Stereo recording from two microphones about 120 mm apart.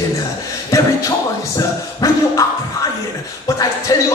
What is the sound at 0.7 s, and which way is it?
Music, 25° left (ahead or behind).